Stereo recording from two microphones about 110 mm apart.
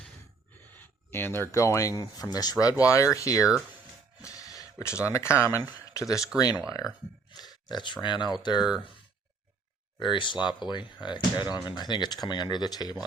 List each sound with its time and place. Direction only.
0.8 s a sound: 20° left (ahead or behind)
1.5 s speech: 30° left (ahead or behind)
3.4 s speech: 10° right (ahead or behind)
4.3 s a sound: 35° left (ahead or behind)
5.1 s speech: 25° left (ahead or behind); by 8.6 s 40° left (ahead or behind)
10.0 s speech: 45° left (ahead or behind)